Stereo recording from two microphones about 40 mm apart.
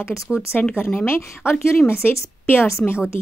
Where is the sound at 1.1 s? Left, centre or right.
Left.